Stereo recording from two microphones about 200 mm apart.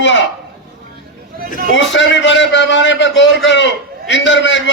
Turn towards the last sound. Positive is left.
turn(degrees=65)  # may be behind; listen again after turning